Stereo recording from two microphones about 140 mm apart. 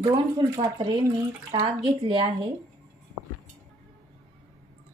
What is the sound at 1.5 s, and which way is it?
Speech, 40° right (ahead or behind).